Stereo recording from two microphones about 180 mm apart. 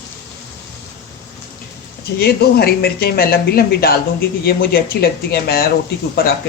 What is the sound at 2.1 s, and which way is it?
Speech, 60° left (ahead or behind).